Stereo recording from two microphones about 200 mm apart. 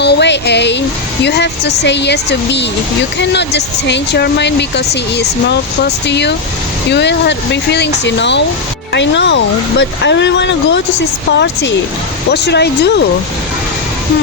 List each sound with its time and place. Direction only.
0.0 s speech: 55° left (ahead or behind)